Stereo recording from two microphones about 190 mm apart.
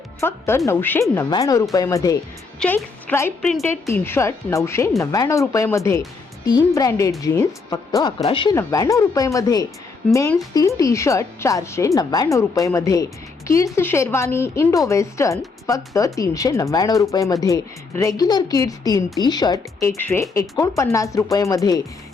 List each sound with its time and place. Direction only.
0.2 s speech: 15° left (ahead or behind)
8.5 s speech: 15° left (ahead or behind)
19.9 s speech: 10° left (ahead or behind)